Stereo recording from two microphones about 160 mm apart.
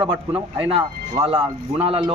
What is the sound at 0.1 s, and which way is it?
Speech, 35° right (ahead or behind).